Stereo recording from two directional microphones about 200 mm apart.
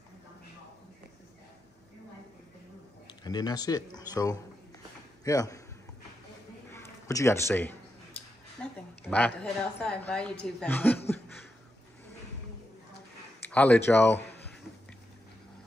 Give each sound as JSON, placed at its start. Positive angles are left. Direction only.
{"t": 3.3, "sound": "a man's voice", "side_deg": 20}
{"t": 6.7, "sound": "a sound", "side_deg": 15}
{"t": 9.0, "sound": "a woman's voice", "side_deg": 5}
{"t": 13.4, "sound": "speech", "side_deg": 5}